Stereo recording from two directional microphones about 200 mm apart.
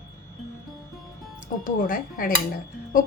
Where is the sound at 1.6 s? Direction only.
45° left (ahead or behind).